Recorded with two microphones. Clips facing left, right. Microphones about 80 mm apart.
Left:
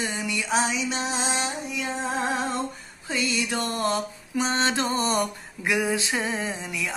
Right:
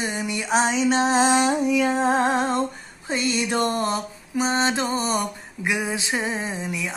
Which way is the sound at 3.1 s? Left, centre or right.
Right.